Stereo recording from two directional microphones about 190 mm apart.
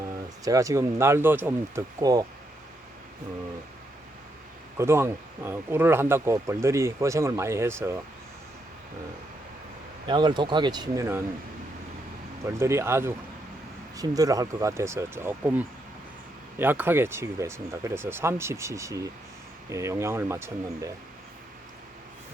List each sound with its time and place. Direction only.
0.0 s speech: 15° right (ahead or behind)
4.8 s speech: 15° right (ahead or behind)
10.1 s speech: 25° right (ahead or behind)
12.5 s speech: 15° right (ahead or behind)